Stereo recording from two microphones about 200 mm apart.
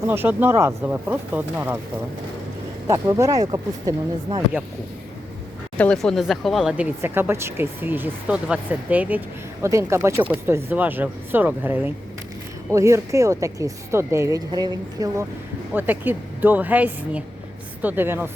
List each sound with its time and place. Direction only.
0.1 s speech: 10° right (ahead or behind)
2.8 s speech: 15° right (ahead or behind)
5.7 s speech: 5° left (ahead or behind); by 18.3 s 10° right (ahead or behind)